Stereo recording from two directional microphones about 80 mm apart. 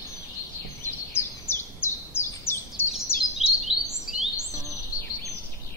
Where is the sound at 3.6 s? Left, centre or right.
Centre.